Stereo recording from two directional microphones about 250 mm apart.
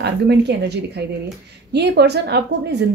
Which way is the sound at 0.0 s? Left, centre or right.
Right.